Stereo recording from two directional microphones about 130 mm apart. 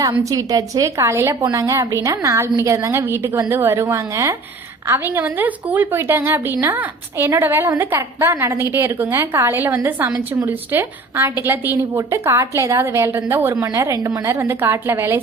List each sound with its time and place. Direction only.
0.1 s a woman's voice: 30° right (ahead or behind)